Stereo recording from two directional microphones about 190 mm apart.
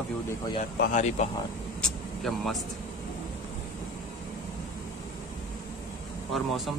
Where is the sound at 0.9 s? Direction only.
40° left (ahead or behind).